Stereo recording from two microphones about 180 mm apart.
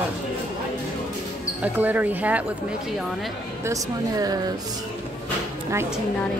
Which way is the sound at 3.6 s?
20° right (ahead or behind).